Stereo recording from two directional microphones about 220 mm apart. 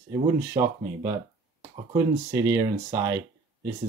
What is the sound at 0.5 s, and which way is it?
Speech, 10° right (ahead or behind).